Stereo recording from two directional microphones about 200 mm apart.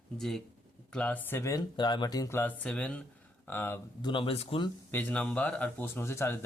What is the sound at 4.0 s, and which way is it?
Speech, 25° left (ahead or behind).